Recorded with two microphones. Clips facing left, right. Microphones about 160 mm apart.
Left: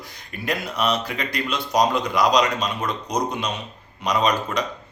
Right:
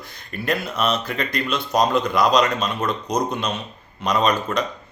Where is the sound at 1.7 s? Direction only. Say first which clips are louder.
Right 1 dB; 15° left (ahead or behind).